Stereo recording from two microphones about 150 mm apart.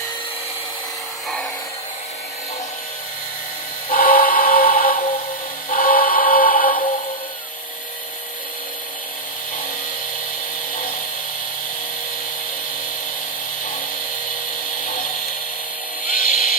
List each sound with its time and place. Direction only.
3.9 s music: 75° left (ahead or behind)
5.7 s synthetic singing: 70° left (ahead or behind)
16.0 s a sound: 60° left (ahead or behind)